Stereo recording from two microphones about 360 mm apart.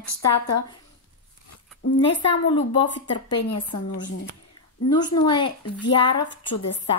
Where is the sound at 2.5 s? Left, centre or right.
Centre.